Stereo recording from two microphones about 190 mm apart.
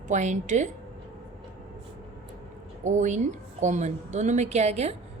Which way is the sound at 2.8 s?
40° right (ahead or behind).